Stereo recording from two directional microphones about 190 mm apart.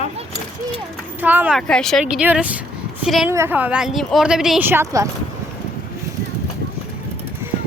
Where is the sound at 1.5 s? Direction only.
5° left (ahead or behind).